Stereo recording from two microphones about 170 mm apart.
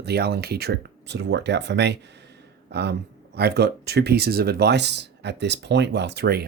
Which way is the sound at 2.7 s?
75° right (ahead or behind).